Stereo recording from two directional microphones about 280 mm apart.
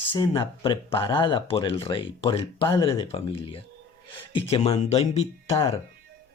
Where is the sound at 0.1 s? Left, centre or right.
Centre.